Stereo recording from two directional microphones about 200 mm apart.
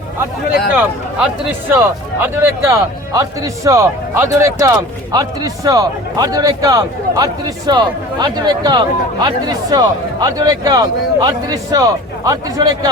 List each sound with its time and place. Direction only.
0.8 s a man's voice: 10° right (ahead or behind)